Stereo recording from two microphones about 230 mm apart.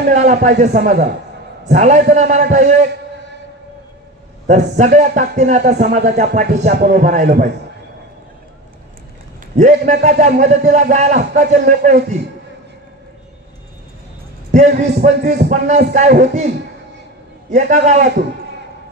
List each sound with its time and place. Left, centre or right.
0.1 s speech: right
4.5 s speech: right
9.6 s speech: right
14.5 s speech: right
17.5 s speech: right